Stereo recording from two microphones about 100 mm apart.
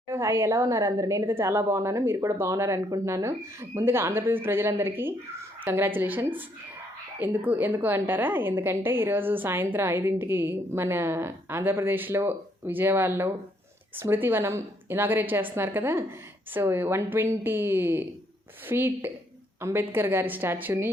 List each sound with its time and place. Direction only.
0.1 s a woman's voice: 25° right (ahead or behind)